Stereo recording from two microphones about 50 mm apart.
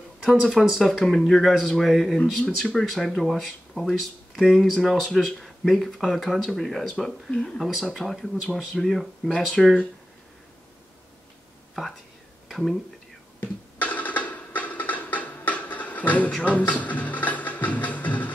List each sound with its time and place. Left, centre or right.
0.2 s speech: centre
2.1 s speech: left
2.7 s speech: centre
5.4 s a sound: centre
6.1 s speech: centre
7.6 s speech: centre
12.4 s a sound: centre
13.4 s music: left